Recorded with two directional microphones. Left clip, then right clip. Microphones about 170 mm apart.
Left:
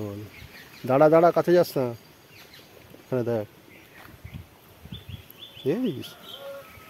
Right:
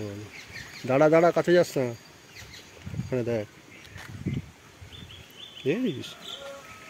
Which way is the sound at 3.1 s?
10° left (ahead or behind).